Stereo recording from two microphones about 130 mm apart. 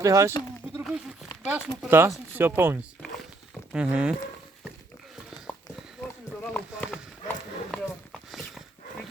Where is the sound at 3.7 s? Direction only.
10° right (ahead or behind).